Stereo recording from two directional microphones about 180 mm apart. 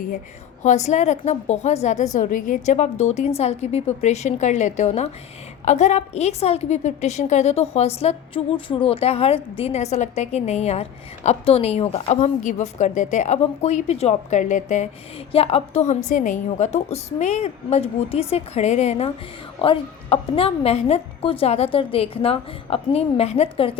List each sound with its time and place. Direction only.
0.6 s a woman's voice: 40° left (ahead or behind)